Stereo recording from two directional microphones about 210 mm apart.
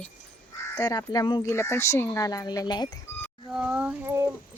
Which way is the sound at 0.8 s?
20° left (ahead or behind).